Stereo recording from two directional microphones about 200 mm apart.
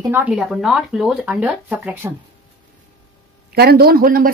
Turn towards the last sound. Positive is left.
turn(degrees=-45)  # may be behind; listen again after turning